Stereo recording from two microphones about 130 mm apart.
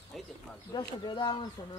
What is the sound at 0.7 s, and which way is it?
Speech, 35° left (ahead or behind).